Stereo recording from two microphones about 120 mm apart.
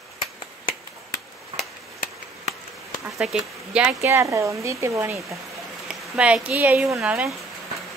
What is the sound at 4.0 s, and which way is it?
Speech, 25° right (ahead or behind).